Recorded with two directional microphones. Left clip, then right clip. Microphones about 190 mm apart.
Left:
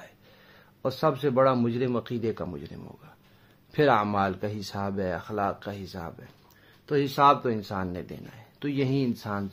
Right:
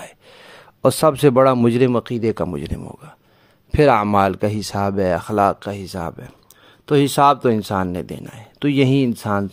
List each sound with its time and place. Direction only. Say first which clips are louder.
0.0 s speech: right 12 dB; 60° right (ahead or behind)